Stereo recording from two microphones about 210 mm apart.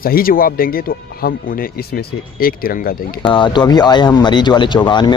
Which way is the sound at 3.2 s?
20° left (ahead or behind).